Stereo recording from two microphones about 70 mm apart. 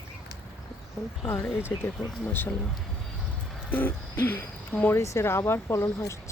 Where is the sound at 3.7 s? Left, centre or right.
Left.